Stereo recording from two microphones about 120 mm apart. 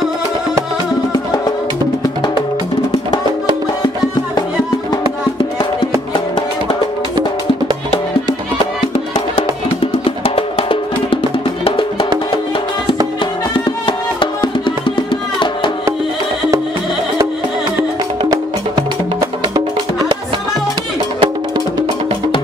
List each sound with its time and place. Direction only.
8.9 s music: 50° left (ahead or behind)
13.8 s music: 45° left (ahead or behind)
19.5 s music: 30° right (ahead or behind)
21.2 s music: 35° right (ahead or behind)